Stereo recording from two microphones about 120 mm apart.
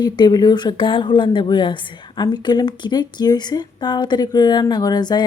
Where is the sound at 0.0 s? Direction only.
35° left (ahead or behind).